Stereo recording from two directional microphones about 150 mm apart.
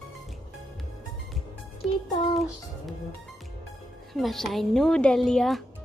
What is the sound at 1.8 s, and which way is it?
Music, centre (ahead or behind).